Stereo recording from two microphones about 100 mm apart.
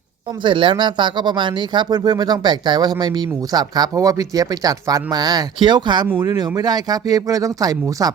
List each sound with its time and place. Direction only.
0.4 s speech: 55° right (ahead or behind); by 8.1 s 40° right (ahead or behind)